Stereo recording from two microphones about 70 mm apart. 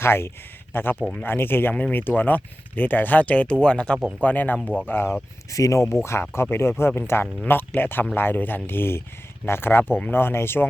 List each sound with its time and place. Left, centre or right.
0.0 s speech: left
1.7 s speech: centre
5.5 s speech: left